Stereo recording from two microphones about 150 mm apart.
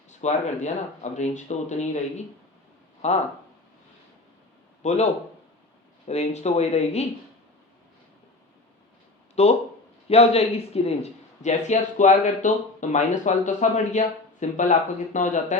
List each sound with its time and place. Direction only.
0.1 s speech: 50° left (ahead or behind)
4.8 s a man's voice: 50° left (ahead or behind)
6.1 s speech: 45° left (ahead or behind)
9.3 s speech: 45° left (ahead or behind)